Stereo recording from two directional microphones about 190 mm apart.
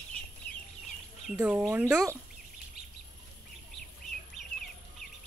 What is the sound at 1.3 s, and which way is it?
Speech, 5° right (ahead or behind).